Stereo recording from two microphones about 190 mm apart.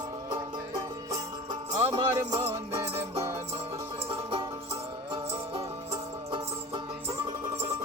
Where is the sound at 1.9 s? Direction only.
25° right (ahead or behind).